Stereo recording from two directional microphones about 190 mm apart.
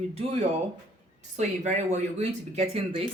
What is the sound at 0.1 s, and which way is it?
A woman's voice, 35° right (ahead or behind).